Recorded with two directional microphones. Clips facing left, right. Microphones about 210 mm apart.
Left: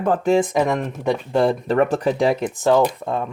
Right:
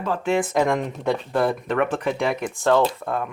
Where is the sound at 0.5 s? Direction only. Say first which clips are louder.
Left 1 dB; 5° left (ahead or behind).